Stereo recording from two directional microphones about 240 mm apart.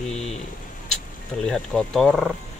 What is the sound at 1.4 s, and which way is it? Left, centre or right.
Speech, centre.